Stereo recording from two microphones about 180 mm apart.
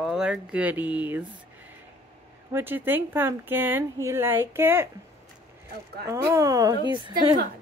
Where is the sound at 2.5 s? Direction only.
10° right (ahead or behind).